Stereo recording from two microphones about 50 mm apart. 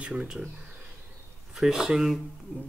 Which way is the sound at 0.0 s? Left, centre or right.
Centre.